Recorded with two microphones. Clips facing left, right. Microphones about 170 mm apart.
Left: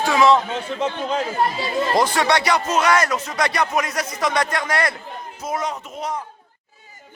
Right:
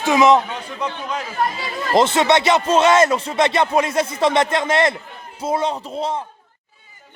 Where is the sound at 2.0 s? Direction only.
25° right (ahead or behind).